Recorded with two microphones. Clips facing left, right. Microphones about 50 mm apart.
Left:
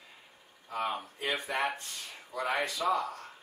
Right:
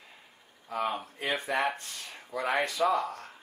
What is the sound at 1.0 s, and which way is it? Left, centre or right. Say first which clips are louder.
Speech: right 2 dB; right.